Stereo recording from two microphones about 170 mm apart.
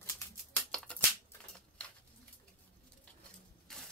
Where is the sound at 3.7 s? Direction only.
5° left (ahead or behind).